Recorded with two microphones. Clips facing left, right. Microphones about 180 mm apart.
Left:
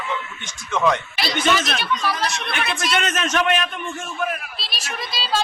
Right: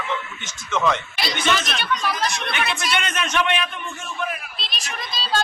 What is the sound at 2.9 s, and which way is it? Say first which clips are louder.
Speech: left 3 dB; 45° left (ahead or behind).